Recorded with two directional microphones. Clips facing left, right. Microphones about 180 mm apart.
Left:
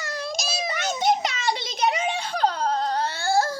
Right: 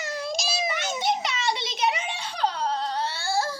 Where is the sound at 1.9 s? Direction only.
45° left (ahead or behind).